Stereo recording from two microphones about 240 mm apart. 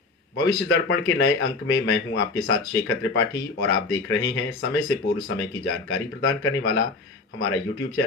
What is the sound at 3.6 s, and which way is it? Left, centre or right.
Speech, left.